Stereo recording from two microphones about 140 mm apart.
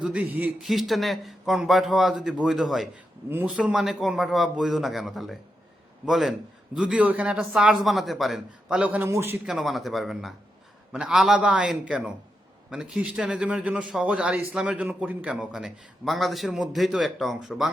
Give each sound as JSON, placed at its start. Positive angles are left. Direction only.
{"t": 0.0, "sound": "a man's voice", "side_deg": -10}
{"t": 3.2, "sound": "speech", "side_deg": -15}
{"t": 3.5, "sound": "a man's voice", "side_deg": -5}
{"t": 9.5, "sound": "a man's voice", "side_deg": 0}